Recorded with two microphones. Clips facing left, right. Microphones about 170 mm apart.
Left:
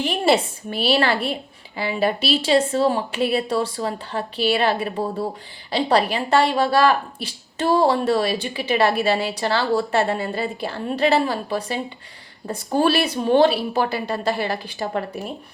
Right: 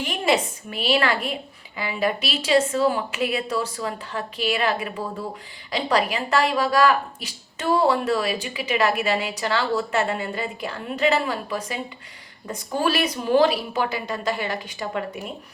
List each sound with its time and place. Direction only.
0.0 s speech: 30° left (ahead or behind)